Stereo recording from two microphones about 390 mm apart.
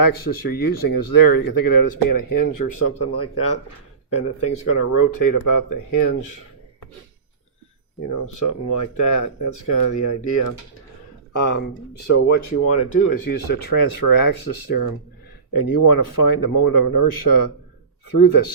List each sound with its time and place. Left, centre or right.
0.0 s speech: left
3.2 s speech: left
8.3 s speech: left
12.3 s speech: left